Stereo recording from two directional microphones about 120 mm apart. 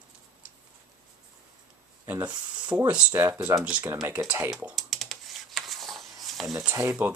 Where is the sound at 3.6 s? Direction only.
10° right (ahead or behind).